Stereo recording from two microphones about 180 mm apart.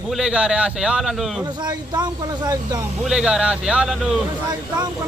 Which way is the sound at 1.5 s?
25° right (ahead or behind).